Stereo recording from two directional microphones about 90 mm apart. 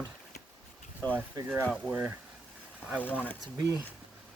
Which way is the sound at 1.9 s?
15° right (ahead or behind).